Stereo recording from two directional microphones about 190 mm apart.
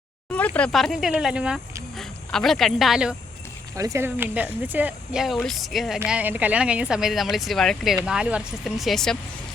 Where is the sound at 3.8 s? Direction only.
15° right (ahead or behind).